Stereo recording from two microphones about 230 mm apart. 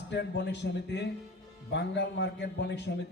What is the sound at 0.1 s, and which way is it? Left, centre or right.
A man's voice, left.